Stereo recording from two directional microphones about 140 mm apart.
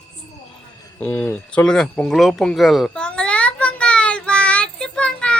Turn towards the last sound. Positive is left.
turn(degrees=5)  # may be behind; listen again after turning